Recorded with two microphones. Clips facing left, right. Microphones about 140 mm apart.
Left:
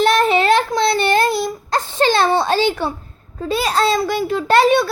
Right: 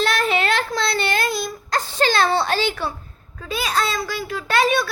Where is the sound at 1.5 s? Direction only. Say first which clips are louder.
Left 4 dB; 25° left (ahead or behind).